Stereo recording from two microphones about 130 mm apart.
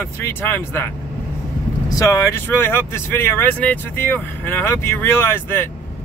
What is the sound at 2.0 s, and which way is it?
Speech, 25° left (ahead or behind).